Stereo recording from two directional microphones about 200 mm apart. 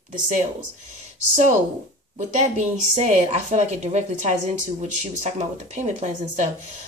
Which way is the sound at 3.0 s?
35° right (ahead or behind).